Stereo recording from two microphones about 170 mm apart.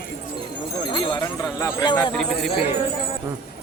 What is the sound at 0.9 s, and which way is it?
Speech, 25° left (ahead or behind).